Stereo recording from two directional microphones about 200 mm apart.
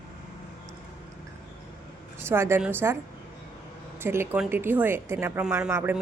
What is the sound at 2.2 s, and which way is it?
Speech, 10° right (ahead or behind).